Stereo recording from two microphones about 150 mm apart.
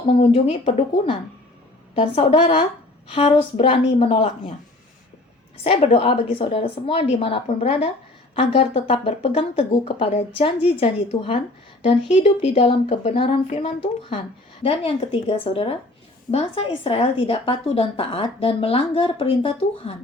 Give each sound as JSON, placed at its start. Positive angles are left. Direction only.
{"t": 0.1, "sound": "a woman's voice", "side_deg": 35}
{"t": 5.6, "sound": "a woman's voice", "side_deg": 40}
{"t": 12.5, "sound": "a woman's voice", "side_deg": 45}